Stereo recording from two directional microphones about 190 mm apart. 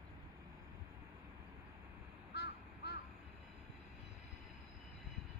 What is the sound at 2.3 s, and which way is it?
Crow, 60° left (ahead or behind).